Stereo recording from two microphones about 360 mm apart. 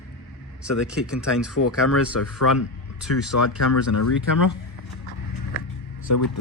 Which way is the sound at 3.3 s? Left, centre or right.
Left.